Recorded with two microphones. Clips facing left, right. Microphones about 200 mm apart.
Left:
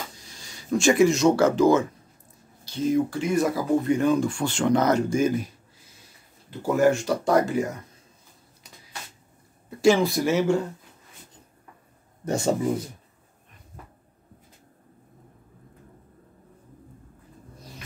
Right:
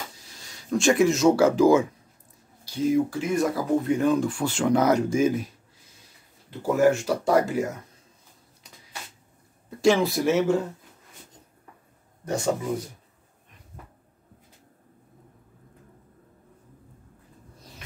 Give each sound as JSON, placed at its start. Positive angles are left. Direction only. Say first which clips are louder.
{"t": 0.2, "sound": "speech", "louder": "left 2 dB", "side_deg": 0}
{"t": 6.6, "sound": "speech", "louder": "even", "side_deg": -5}
{"t": 9.7, "sound": "speech", "louder": "left 1 dB", "side_deg": 5}
{"t": 12.3, "sound": "speech", "louder": "left 2 dB", "side_deg": 25}